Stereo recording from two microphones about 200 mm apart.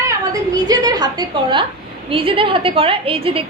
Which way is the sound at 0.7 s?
20° right (ahead or behind).